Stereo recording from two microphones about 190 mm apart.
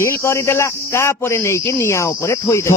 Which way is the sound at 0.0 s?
15° left (ahead or behind).